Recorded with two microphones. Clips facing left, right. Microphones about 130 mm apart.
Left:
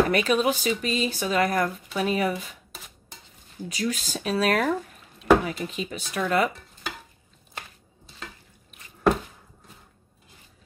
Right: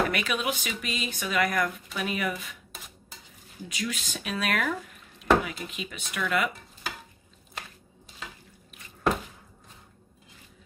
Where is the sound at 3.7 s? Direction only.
35° left (ahead or behind).